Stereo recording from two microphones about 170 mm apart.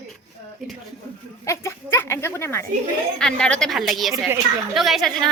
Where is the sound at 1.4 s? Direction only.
15° left (ahead or behind).